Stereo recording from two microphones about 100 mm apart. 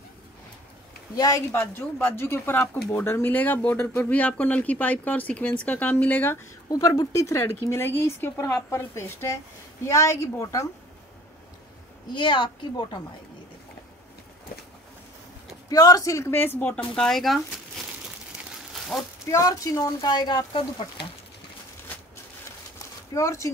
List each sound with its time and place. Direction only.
1.1 s speech: 40° left (ahead or behind)
1.5 s speech: 20° left (ahead or behind)
6.7 s speech: 35° left (ahead or behind)
12.1 s a woman's voice: 50° left (ahead or behind)
15.7 s speech: 35° left (ahead or behind); by 16.8 s 15° left (ahead or behind)
16.9 s speech: 5° left (ahead or behind)
18.7 s a sound: centre (ahead or behind)
19.3 s speech: 35° left (ahead or behind); by 21.1 s 50° left (ahead or behind)
23.1 s speech: 30° left (ahead or behind)